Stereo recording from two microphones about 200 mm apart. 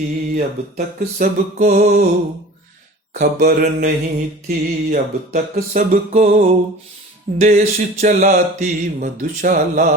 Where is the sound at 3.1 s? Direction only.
45° right (ahead or behind).